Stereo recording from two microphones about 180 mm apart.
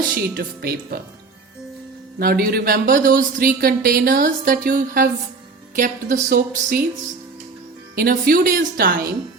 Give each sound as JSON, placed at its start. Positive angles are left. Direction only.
{"t": 0.3, "sound": "speech", "side_deg": -60}
{"t": 2.1, "sound": "speech", "side_deg": -55}
{"t": 7.9, "sound": "speech", "side_deg": -55}